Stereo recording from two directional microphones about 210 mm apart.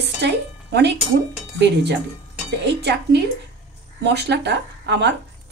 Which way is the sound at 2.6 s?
55° right (ahead or behind).